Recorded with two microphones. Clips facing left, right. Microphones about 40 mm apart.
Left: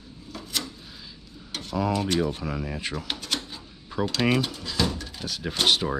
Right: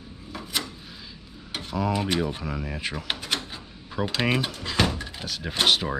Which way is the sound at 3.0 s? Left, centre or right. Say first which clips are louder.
Right 2 dB; centre.